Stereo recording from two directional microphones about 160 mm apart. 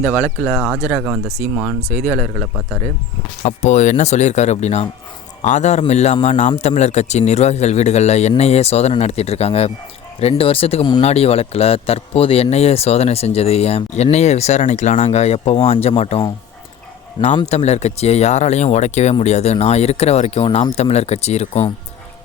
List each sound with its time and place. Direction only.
0.1 s speech: 10° right (ahead or behind)
2.3 s a man's voice: 15° left (ahead or behind)
3.4 s speech: 45° left (ahead or behind)
17.4 s speech: 45° left (ahead or behind)